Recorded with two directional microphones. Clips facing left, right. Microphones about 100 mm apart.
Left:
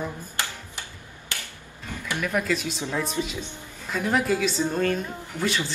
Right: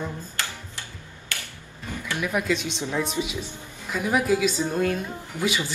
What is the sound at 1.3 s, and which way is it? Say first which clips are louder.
Finger snapping: right 1 dB; 20° left (ahead or behind).